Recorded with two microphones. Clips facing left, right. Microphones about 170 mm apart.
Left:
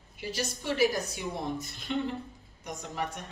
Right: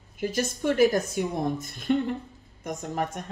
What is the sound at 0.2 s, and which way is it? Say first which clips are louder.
Speech: right 8 dB; 50° right (ahead or behind).